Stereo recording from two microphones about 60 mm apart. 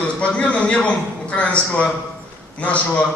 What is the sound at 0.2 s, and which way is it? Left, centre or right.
A man's voice, centre.